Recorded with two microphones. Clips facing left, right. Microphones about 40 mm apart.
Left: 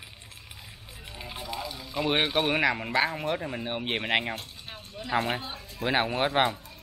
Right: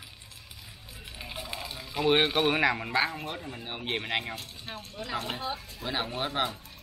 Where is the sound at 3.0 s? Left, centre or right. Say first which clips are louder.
Left 3 dB; left.